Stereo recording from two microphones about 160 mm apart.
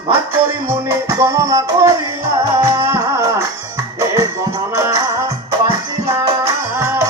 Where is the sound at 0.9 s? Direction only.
20° right (ahead or behind).